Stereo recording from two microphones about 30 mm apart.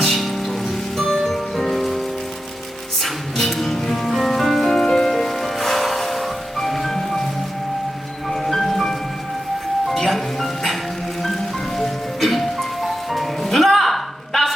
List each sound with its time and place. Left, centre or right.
0.0 s music: centre
3.3 s music: centre
4.8 s music: centre
5.4 s music: centre
8.3 s marimba: centre
9.9 s music: centre
11.8 s music: centre